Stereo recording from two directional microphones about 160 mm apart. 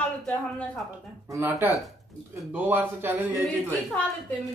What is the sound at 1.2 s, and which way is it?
Speech, 15° right (ahead or behind).